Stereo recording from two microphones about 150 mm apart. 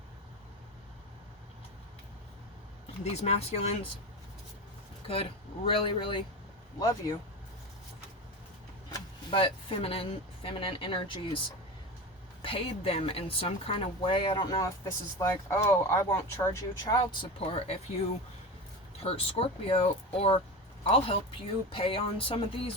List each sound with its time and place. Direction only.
3.0 s speech: 45° left (ahead or behind)
5.0 s speech: 40° left (ahead or behind)
6.7 s speech: 20° left (ahead or behind)
9.3 s speech: 35° left (ahead or behind)
12.4 s speech: 40° left (ahead or behind); by 17.0 s 20° left (ahead or behind)
17.0 s speech: 40° left (ahead or behind)
19.0 s speech: 40° left (ahead or behind)